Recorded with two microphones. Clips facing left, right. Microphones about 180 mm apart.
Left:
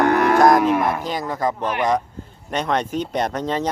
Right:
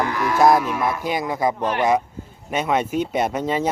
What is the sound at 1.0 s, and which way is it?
Speech, 10° right (ahead or behind).